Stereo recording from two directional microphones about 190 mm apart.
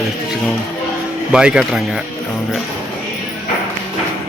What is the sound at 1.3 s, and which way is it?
Speech, 5° right (ahead or behind).